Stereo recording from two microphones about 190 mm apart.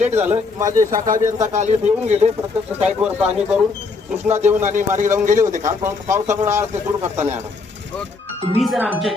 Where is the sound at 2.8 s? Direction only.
5° right (ahead or behind).